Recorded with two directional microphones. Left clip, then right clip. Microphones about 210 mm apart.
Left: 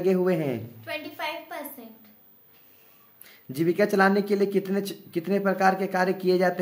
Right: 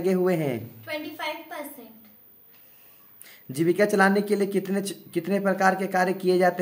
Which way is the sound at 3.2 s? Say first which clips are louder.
Right 2 dB; 5° right (ahead or behind).